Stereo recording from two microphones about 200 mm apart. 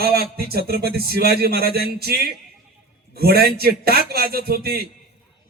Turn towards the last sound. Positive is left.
turn(degrees=-50)  # may be behind; listen again after turning